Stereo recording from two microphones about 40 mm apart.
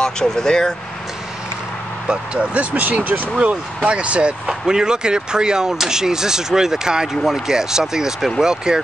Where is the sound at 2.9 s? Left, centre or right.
Right.